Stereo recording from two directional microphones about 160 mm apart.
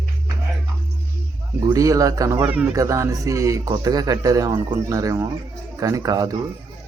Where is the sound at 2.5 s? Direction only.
10° right (ahead or behind).